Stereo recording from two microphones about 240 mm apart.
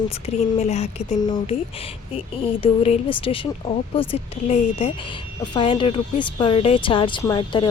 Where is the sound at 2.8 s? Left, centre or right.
Left.